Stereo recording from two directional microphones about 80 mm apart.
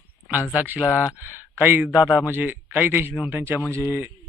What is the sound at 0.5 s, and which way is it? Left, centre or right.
Speech, centre.